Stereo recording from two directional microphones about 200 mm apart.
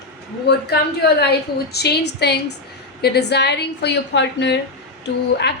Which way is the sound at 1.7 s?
55° left (ahead or behind).